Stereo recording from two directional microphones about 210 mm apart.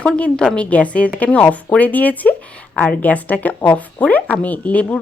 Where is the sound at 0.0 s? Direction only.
5° left (ahead or behind).